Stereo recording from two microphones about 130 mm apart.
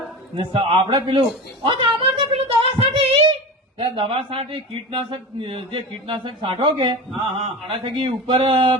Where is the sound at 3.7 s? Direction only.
45° right (ahead or behind).